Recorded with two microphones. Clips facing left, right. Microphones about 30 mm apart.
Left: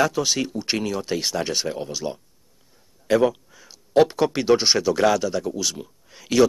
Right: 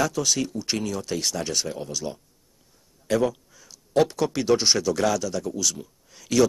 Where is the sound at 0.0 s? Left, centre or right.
Left.